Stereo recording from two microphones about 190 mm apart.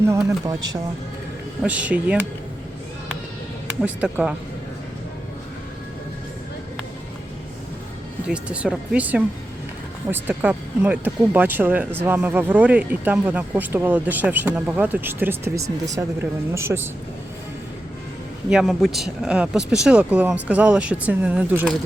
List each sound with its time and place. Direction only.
0.1 s speech: 15° right (ahead or behind)
1.6 s speech: 5° right (ahead or behind)
3.8 s speech: 5° right (ahead or behind)
8.3 s speech: 5° right (ahead or behind)
18.5 s speech: centre (ahead or behind)